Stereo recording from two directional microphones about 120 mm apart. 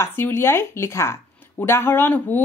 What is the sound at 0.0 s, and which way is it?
Speech, 20° left (ahead or behind).